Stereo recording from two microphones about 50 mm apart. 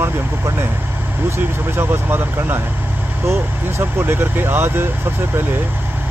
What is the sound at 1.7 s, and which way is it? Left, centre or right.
Speech, right.